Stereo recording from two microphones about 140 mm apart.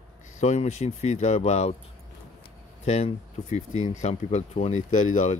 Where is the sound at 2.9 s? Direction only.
50° left (ahead or behind).